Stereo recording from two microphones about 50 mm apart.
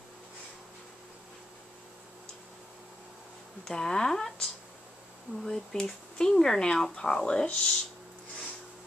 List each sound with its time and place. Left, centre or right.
3.6 s speech: centre